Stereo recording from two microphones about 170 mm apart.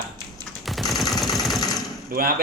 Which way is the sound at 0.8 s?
Centre (ahead or behind).